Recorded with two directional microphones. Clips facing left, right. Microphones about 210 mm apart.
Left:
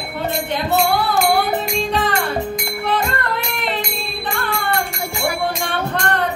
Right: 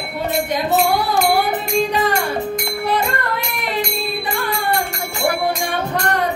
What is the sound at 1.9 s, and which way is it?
Music, 10° right (ahead or behind).